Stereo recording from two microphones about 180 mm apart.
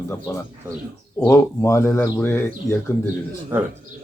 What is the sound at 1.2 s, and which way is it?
Speech, 15° left (ahead or behind).